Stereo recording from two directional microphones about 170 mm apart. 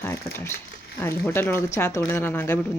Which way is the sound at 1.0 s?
15° left (ahead or behind).